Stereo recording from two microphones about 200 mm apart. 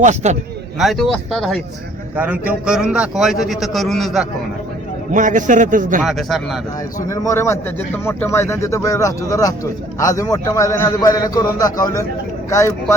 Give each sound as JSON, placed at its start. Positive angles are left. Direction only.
{"t": 0.0, "sound": "a man's voice", "side_deg": -35}
{"t": 0.8, "sound": "a man's voice", "side_deg": 0}
{"t": 5.1, "sound": "a man's voice", "side_deg": -40}
{"t": 6.0, "sound": "a man's voice", "side_deg": 0}
{"t": 7.1, "sound": "a man's voice", "side_deg": 15}